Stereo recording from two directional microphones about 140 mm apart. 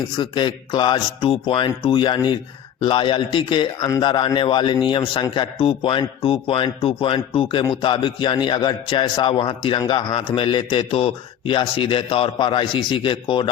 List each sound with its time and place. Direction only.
0.2 s a man's voice: 35° left (ahead or behind)